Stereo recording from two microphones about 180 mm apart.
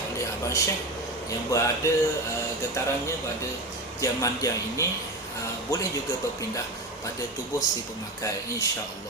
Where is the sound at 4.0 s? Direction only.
15° left (ahead or behind).